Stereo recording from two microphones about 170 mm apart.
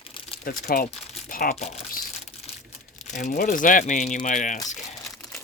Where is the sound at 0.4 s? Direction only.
55° left (ahead or behind).